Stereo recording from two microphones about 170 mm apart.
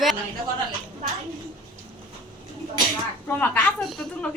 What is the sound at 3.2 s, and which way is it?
A woman's voice, 15° left (ahead or behind).